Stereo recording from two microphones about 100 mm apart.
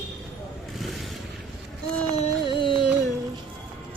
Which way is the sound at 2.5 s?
55° left (ahead or behind).